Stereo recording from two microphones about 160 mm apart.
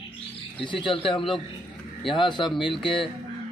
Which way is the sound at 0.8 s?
30° left (ahead or behind).